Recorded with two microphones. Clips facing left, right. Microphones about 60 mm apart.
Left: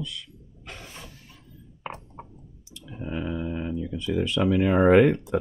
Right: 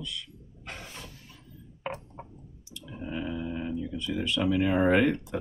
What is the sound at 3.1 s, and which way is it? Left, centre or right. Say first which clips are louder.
Speech: left 3 dB; left.